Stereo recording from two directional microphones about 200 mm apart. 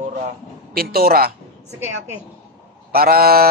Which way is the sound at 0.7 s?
50° right (ahead or behind).